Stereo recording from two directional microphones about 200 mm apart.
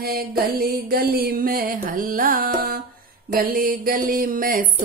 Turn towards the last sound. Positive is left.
turn(degrees=-45)  # may be behind; listen again after turning